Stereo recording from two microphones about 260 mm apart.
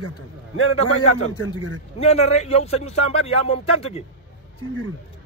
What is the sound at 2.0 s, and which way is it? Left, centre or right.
A man's voice, left.